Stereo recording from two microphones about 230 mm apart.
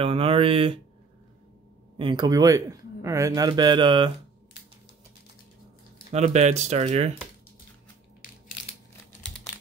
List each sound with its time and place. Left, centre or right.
0.0 s a sound: right
2.0 s a man's voice: centre
6.1 s speech: right